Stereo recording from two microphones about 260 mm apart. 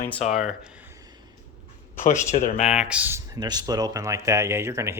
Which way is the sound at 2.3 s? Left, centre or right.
Left.